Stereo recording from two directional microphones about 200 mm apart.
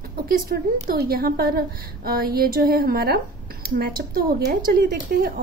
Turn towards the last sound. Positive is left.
turn(degrees=-50)  # may be behind; listen again after turning